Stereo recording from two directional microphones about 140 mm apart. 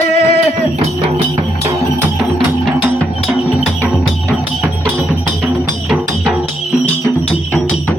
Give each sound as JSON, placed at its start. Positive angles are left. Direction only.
{"t": 0.1, "sound": "music", "side_deg": 50}